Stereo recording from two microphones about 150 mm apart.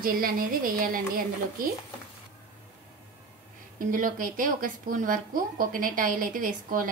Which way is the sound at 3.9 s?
65° right (ahead or behind).